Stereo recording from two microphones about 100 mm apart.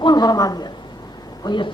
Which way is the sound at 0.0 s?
40° left (ahead or behind).